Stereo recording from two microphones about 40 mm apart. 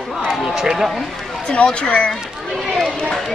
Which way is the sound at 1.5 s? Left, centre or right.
Left.